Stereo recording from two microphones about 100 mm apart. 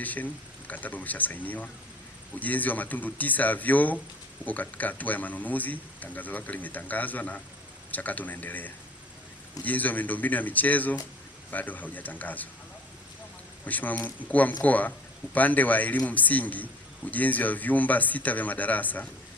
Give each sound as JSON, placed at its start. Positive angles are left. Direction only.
{"t": 0.0, "sound": "speech", "side_deg": 15}
{"t": 13.7, "sound": "speech", "side_deg": 15}